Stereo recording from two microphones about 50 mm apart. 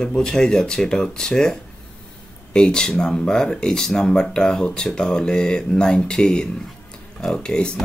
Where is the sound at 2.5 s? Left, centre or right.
Centre.